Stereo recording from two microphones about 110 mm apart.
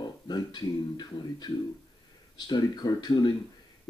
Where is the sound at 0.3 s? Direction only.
40° left (ahead or behind).